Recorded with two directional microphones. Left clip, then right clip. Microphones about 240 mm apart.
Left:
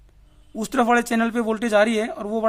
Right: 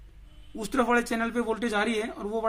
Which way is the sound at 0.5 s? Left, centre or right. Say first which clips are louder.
Left 6 dB; left.